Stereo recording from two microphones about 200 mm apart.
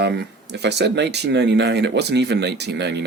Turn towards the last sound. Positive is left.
turn(degrees=-60)  # may be behind; listen again after turning